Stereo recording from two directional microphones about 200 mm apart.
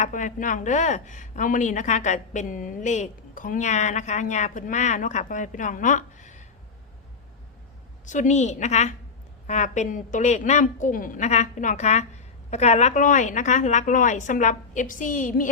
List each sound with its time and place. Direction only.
0.0 s a woman's voice: 40° left (ahead or behind)
8.0 s a woman's voice: 40° left (ahead or behind)